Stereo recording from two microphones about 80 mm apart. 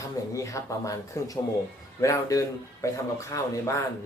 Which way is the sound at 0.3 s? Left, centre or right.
Left.